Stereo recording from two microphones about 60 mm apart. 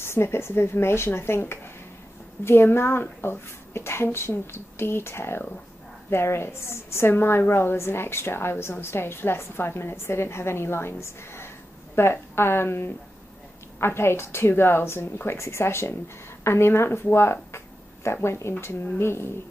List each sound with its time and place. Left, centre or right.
0.0 s a woman's voice: left